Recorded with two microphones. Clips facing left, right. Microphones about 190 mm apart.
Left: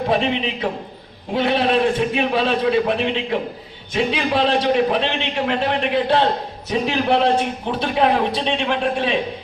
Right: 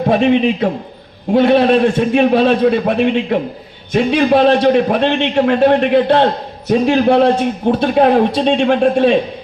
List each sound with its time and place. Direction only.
0.1 s a man's voice: 50° right (ahead or behind)